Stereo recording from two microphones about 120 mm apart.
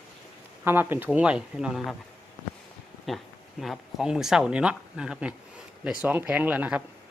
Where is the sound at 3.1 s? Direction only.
Centre (ahead or behind).